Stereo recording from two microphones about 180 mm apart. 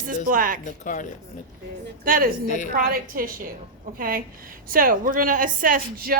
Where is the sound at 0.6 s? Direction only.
45° left (ahead or behind).